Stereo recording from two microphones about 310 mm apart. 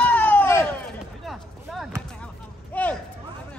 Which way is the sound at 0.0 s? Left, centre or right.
Centre.